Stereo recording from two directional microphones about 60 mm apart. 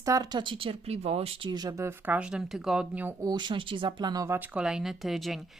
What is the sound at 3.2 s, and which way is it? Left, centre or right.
Speech, right.